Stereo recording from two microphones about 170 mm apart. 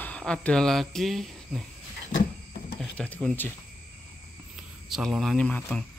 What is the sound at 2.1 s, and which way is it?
Cupboard open or close, 55° left (ahead or behind).